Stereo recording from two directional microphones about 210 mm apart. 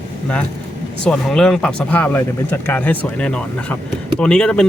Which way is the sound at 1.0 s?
5° left (ahead or behind).